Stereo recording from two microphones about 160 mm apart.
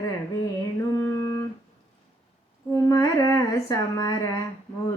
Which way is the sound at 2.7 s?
20° left (ahead or behind).